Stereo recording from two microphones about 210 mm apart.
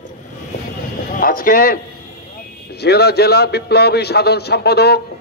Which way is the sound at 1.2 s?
40° left (ahead or behind).